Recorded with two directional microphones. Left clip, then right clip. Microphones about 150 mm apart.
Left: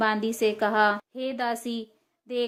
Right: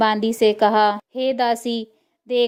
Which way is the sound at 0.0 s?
40° right (ahead or behind).